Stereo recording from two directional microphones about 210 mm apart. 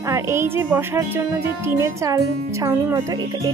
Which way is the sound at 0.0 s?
15° right (ahead or behind).